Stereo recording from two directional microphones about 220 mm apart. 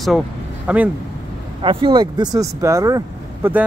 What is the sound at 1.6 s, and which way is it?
Speech, 25° right (ahead or behind).